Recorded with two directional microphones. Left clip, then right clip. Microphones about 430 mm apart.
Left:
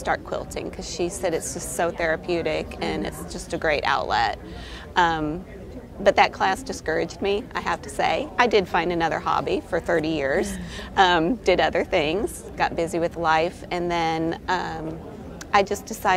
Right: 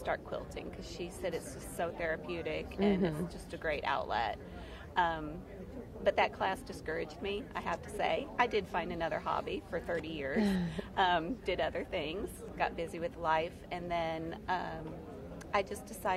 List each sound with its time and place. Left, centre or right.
0.0 s a woman's voice: left